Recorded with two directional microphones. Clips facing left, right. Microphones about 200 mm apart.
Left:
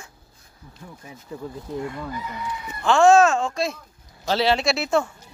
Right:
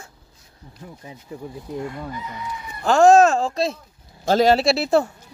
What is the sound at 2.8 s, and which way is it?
Speech, 40° right (ahead or behind).